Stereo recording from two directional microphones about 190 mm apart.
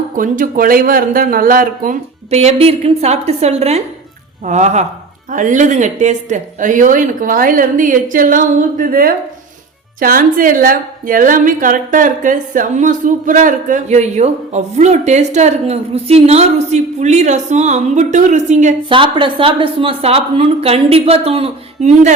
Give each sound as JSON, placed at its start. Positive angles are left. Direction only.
{"t": 0.2, "sound": "speech", "side_deg": -45}
{"t": 2.3, "sound": "a woman's voice", "side_deg": -30}
{"t": 18.9, "sound": "a woman's voice", "side_deg": -25}